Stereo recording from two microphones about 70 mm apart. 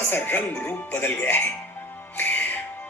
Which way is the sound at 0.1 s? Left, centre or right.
Left.